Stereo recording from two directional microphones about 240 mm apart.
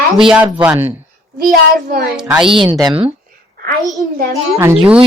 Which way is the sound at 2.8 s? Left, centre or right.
Right.